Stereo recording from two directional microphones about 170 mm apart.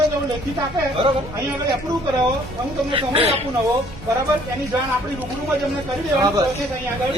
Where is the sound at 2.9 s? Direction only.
30° right (ahead or behind).